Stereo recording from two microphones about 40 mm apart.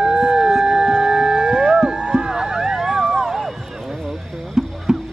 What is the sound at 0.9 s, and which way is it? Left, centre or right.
Music, centre.